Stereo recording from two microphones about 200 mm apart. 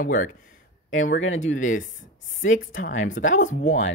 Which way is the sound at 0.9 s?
80° left.